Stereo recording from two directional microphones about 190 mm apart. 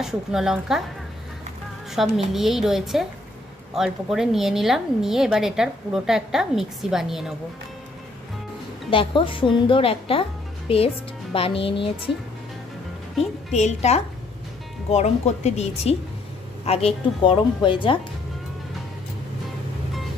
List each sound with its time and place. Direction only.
0.0 s a woman's voice: centre (ahead or behind)
2.0 s a woman's voice: centre (ahead or behind)
8.9 s a woman's voice: 25° left (ahead or behind)
13.5 s a woman's voice: 35° left (ahead or behind)